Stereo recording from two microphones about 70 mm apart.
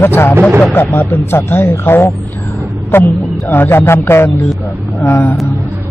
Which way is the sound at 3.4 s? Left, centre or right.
Left.